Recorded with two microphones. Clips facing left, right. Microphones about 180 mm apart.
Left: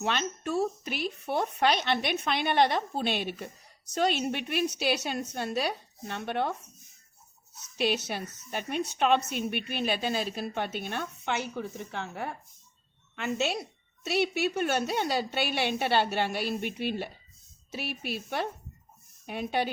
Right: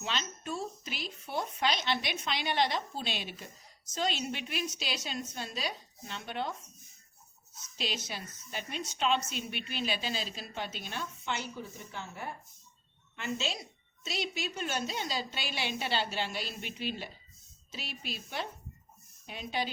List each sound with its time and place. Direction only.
0.0 s a woman's voice: 60° left (ahead or behind)